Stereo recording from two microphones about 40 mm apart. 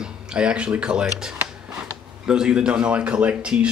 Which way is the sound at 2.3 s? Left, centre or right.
Right.